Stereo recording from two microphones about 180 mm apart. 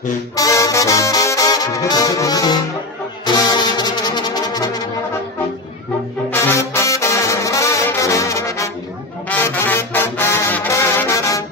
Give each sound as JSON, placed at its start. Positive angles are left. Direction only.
{"t": 0.4, "sound": "brass instrument", "side_deg": 20}
{"t": 6.3, "sound": "brass instrument", "side_deg": 15}